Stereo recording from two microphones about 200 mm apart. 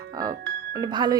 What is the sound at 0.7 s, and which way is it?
Speech, 20° right (ahead or behind).